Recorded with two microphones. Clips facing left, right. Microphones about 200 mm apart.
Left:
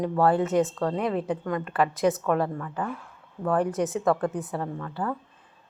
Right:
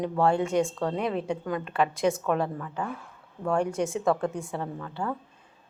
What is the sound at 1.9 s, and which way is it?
Speech, centre (ahead or behind).